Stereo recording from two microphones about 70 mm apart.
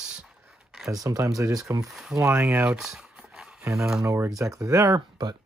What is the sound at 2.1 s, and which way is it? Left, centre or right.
Speech, right.